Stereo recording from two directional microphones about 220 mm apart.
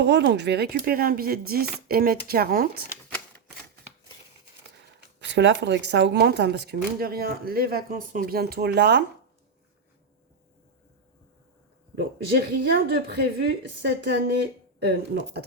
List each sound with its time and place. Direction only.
0.0 s speech: 50° right (ahead or behind)
5.2 s speech: 55° right (ahead or behind)
11.9 s speech: 45° right (ahead or behind)